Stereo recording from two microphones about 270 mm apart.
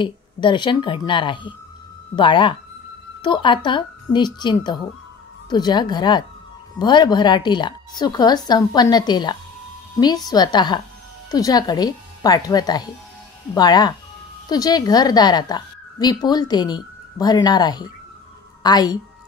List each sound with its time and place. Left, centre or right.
0.0 s a woman's voice: centre